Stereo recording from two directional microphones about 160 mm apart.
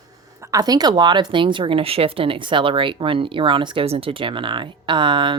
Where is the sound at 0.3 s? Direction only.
20° right (ahead or behind).